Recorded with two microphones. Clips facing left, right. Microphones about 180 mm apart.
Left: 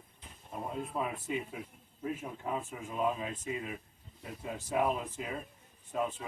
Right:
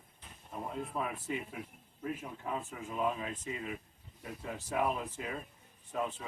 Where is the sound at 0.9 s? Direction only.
20° left (ahead or behind).